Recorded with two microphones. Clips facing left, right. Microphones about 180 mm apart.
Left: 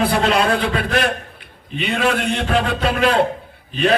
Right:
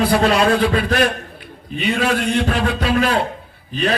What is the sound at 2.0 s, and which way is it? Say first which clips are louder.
Speech: left 3 dB; 55° left (ahead or behind).